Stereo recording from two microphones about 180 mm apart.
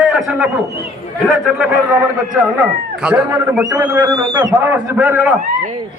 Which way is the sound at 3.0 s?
5° right (ahead or behind).